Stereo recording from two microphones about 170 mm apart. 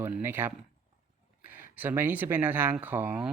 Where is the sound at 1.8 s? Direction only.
10° right (ahead or behind).